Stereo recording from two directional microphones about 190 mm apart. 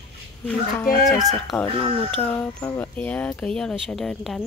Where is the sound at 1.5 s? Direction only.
15° left (ahead or behind).